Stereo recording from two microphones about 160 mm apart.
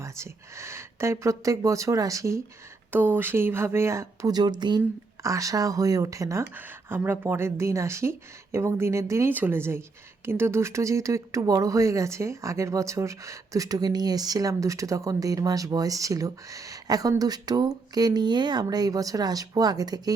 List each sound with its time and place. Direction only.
0.0 s speech: 15° right (ahead or behind)